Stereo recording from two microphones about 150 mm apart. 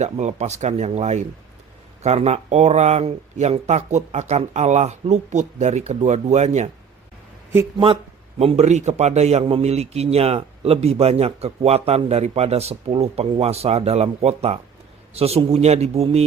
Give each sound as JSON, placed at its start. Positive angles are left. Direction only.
{"t": 0.0, "sound": "a man's voice", "side_deg": -50}
{"t": 8.4, "sound": "a man's voice", "side_deg": -45}